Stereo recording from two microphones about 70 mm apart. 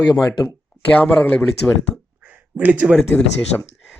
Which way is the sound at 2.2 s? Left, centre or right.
Right.